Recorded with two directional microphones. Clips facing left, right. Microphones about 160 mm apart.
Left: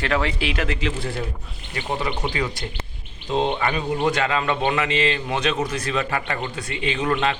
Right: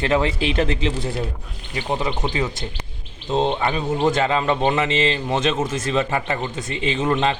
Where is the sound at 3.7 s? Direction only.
25° right (ahead or behind).